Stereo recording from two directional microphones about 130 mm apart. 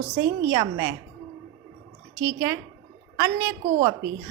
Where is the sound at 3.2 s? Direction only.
20° right (ahead or behind).